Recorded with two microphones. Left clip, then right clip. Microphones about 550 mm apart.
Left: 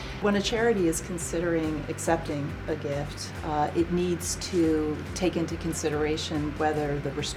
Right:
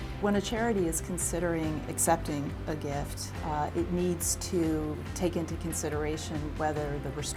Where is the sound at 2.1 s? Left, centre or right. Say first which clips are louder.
Left 1 dB; right.